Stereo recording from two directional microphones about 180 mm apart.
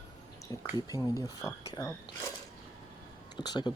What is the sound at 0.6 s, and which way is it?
Speech, 20° left (ahead or behind).